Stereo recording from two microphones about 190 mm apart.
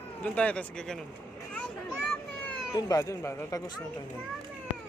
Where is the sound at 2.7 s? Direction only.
15° left (ahead or behind).